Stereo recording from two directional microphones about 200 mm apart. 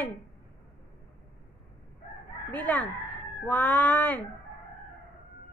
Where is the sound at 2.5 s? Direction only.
10° left (ahead or behind).